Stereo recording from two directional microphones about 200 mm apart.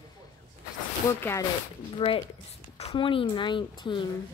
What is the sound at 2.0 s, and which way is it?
Speech, 25° left (ahead or behind).